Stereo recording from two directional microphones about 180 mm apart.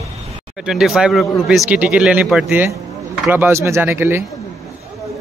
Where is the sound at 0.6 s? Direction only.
Centre (ahead or behind).